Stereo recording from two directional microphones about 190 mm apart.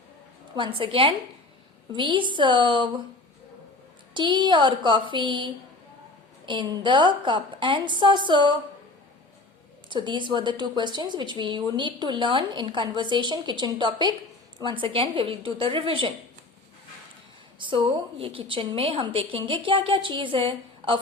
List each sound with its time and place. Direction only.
0.5 s a woman's voice: 25° right (ahead or behind)
4.1 s a woman's voice: 25° right (ahead or behind)
9.9 s a woman's voice: 25° right (ahead or behind)
17.6 s a woman's voice: 25° right (ahead or behind)